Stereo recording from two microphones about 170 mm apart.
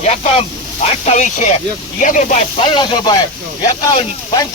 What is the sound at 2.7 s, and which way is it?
Speech, 25° left (ahead or behind).